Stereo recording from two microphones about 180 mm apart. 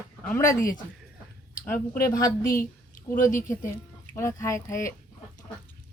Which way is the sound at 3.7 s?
15° left (ahead or behind).